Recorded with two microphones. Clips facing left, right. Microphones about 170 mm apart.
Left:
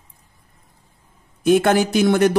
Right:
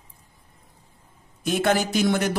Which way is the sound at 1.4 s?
60° left (ahead or behind).